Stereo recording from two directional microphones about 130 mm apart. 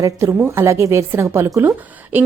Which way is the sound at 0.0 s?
20° right (ahead or behind).